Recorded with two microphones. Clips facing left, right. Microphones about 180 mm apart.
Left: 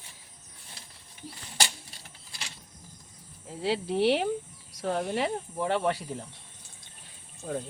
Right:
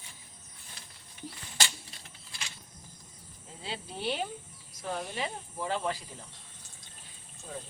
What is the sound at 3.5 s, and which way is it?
Speech, 75° left (ahead or behind).